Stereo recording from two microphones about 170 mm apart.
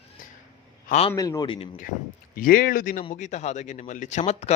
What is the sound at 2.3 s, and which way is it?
Speech, 55° left (ahead or behind).